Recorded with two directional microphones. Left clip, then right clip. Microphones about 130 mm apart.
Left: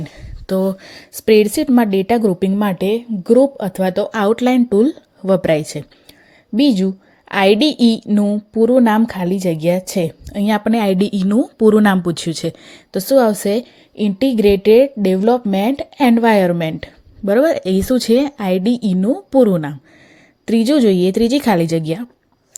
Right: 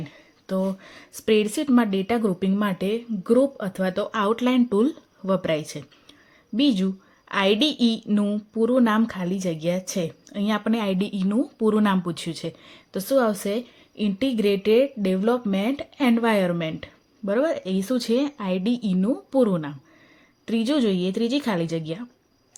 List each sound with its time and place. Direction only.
0.0 s a woman's voice: 65° left (ahead or behind)